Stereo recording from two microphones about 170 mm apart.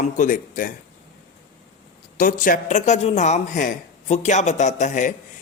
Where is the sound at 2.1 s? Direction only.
55° left (ahead or behind).